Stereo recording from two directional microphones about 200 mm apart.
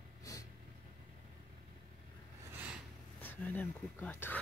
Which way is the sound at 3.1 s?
10° left (ahead or behind).